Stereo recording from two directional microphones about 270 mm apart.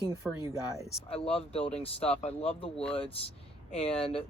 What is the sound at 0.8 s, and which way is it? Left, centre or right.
Speech, left.